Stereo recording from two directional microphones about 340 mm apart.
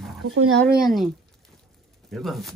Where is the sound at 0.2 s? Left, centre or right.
Right.